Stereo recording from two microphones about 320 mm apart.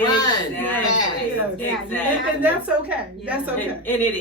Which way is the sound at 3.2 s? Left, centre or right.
Centre.